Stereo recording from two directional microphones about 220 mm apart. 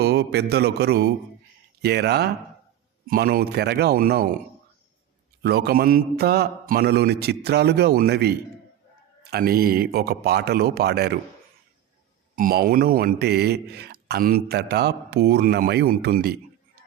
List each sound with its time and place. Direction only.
0.0 s a man's voice: 50° right (ahead or behind)
5.4 s a man's voice: 45° right (ahead or behind)
12.4 s a man's voice: 40° right (ahead or behind)